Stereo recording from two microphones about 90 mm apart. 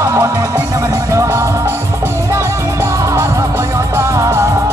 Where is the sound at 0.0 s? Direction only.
35° right (ahead or behind).